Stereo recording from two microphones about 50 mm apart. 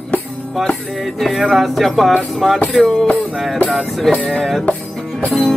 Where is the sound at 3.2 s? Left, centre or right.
Centre.